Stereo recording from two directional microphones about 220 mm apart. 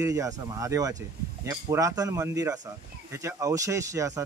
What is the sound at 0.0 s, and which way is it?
Speech, 15° right (ahead or behind).